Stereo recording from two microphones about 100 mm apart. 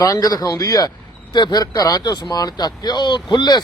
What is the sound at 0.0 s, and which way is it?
Speech, 35° left (ahead or behind).